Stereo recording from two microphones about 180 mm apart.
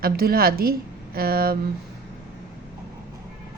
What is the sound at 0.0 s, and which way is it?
A woman's voice, 60° right (ahead or behind).